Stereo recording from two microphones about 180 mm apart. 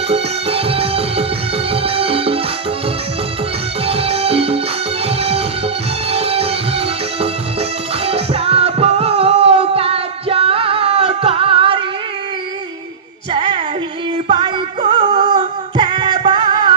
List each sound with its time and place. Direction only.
0.1 s music: 30° right (ahead or behind)
3.8 s music: 35° right (ahead or behind)
14.3 s music: 25° right (ahead or behind)